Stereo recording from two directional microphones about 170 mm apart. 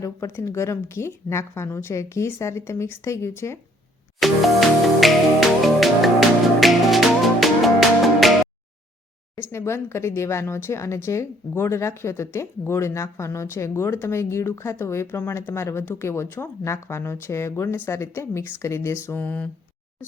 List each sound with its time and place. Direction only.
0.0 s a woman's voice: 15° left (ahead or behind)
4.2 s music: centre (ahead or behind)
9.5 s a woman's voice: 15° left (ahead or behind)